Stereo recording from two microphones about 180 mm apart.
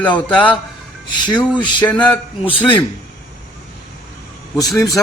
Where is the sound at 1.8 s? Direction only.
10° left (ahead or behind).